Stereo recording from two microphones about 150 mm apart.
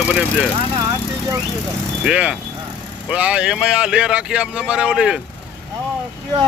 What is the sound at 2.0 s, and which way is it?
Speech, 5° right (ahead or behind).